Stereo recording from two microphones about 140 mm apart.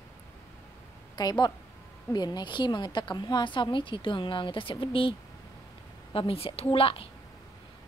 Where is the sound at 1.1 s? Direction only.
30° left (ahead or behind).